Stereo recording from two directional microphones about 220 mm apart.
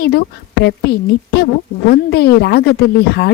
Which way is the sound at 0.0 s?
45° left (ahead or behind).